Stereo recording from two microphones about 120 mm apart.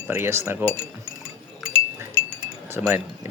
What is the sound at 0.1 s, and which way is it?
Speech, 20° right (ahead or behind).